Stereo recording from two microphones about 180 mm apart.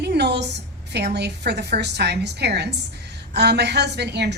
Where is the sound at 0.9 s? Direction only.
65° right (ahead or behind).